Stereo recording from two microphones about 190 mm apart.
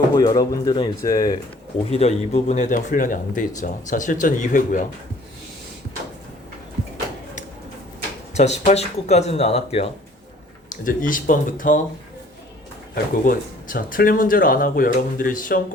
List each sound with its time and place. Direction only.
0.1 s speech: 20° left (ahead or behind)
1.9 s speech: 35° left (ahead or behind)
8.3 s speech: 35° left (ahead or behind)
10.7 s speech: 45° left (ahead or behind)
13.2 s speech: 45° left (ahead or behind)